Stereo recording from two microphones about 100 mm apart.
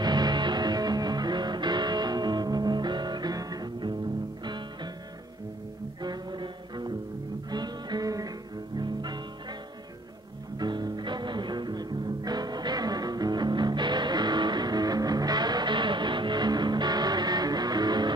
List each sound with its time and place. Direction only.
0.0 s music: 45° right (ahead or behind)
6.0 s music: 50° right (ahead or behind)
10.6 s music: 45° right (ahead or behind)